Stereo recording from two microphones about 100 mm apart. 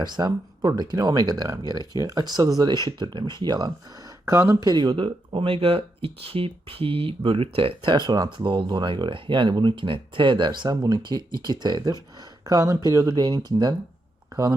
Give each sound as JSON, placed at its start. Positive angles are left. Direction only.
{"t": 0.0, "sound": "speech", "side_deg": -45}
{"t": 4.3, "sound": "speech", "side_deg": -30}
{"t": 4.7, "sound": "speech", "side_deg": -45}
{"t": 5.0, "sound": "speech", "side_deg": -65}
{"t": 7.9, "sound": "speech", "side_deg": -45}
{"t": 12.5, "sound": "speech", "side_deg": -35}